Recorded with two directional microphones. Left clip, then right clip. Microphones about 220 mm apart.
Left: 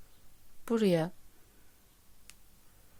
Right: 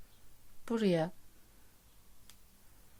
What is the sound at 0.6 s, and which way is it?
Speech, 15° left (ahead or behind).